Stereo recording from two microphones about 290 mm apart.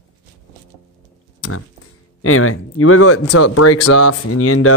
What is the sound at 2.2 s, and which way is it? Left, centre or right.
Speech, left.